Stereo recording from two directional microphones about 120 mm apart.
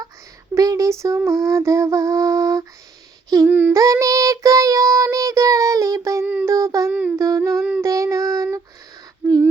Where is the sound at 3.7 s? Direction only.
25° right (ahead or behind).